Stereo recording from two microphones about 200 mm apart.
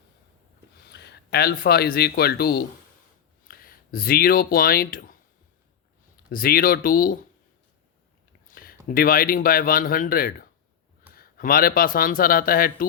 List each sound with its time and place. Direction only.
0.8 s speech: 55° left (ahead or behind)
6.3 s speech: 45° left (ahead or behind)
8.4 s speech: 45° left (ahead or behind)